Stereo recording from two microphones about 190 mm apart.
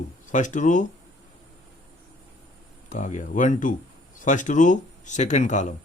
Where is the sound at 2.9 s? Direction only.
40° left (ahead or behind).